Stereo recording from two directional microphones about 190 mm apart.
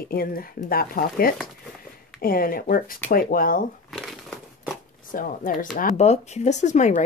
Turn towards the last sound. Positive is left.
turn(degrees=40)  # may be behind; listen again after turning